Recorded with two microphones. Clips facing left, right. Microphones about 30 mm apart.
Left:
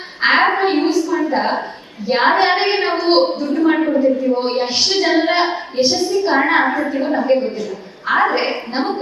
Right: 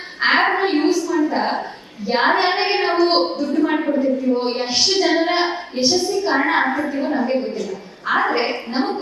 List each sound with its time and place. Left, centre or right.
0.2 s a woman's voice: centre